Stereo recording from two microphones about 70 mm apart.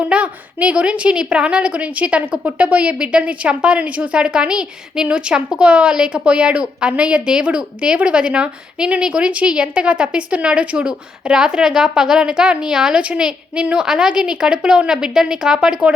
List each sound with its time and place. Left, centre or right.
0.0 s a woman's voice: centre